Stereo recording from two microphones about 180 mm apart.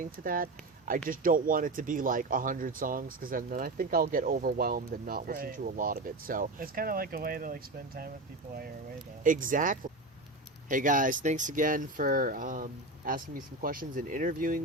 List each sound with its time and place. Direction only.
0.0 s speech: 50° right (ahead or behind)
9.2 s speech: 50° right (ahead or behind)